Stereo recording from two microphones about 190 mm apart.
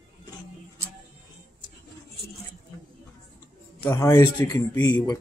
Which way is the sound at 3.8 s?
15° left (ahead or behind).